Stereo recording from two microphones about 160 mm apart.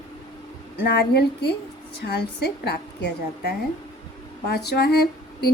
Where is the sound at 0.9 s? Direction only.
90° left.